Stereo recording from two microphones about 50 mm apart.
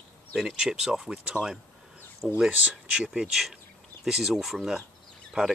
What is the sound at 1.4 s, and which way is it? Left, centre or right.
Speech, right.